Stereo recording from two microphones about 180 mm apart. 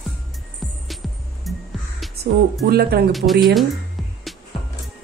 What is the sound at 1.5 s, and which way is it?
Music, centre (ahead or behind).